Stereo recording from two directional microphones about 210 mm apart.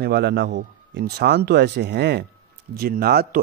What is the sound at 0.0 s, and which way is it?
Speech, 55° right (ahead or behind).